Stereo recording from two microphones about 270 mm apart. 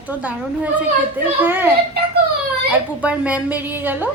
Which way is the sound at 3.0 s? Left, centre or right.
Centre.